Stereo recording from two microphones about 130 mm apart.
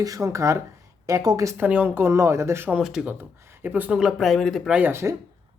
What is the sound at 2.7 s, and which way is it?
Speech, 5° right (ahead or behind).